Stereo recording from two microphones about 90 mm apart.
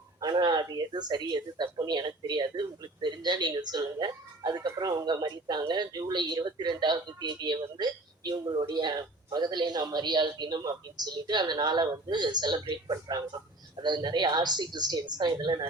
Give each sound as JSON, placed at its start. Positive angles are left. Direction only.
{"t": 0.2, "sound": "speech", "side_deg": -50}